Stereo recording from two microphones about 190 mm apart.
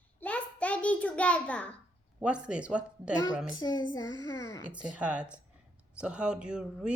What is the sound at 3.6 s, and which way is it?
Child singing, 20° left (ahead or behind).